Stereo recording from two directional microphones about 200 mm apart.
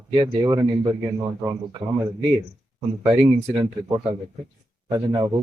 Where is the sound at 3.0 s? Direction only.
20° right (ahead or behind).